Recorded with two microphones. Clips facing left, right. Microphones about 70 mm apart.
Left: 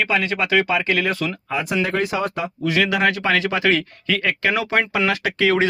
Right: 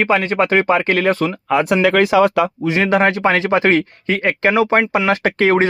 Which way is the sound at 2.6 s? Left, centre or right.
Right.